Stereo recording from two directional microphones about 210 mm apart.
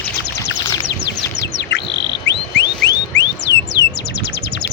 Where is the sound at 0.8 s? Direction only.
55° left (ahead or behind).